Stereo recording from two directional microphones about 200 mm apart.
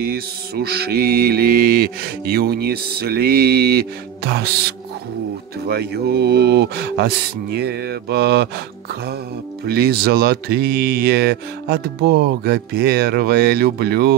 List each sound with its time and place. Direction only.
0.1 s mantra: 50° right (ahead or behind)
9.7 s mantra: 50° right (ahead or behind)